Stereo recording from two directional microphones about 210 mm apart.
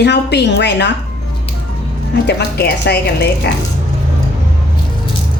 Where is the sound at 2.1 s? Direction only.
50° left (ahead or behind).